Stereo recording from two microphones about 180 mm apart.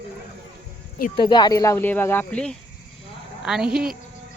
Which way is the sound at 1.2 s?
25° left (ahead or behind).